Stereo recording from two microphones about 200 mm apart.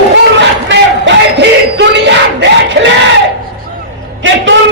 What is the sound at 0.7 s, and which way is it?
Crowd, 60° right (ahead or behind).